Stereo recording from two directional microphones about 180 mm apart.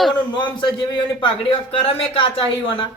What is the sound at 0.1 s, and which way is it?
A man's voice, 25° left (ahead or behind).